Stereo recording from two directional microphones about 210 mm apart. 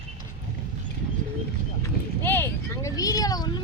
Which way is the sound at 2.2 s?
10° left (ahead or behind).